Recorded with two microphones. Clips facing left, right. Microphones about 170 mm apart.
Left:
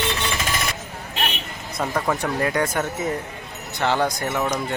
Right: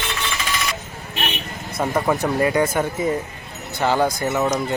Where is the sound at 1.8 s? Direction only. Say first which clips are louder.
Right 3 dB; 15° right (ahead or behind).